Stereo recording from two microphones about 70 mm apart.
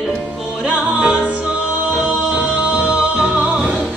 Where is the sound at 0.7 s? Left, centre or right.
Centre.